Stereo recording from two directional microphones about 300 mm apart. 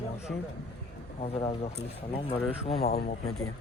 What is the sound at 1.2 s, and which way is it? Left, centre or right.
Speech, centre.